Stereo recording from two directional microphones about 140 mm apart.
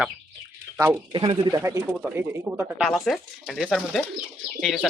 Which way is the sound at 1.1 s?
35° right (ahead or behind).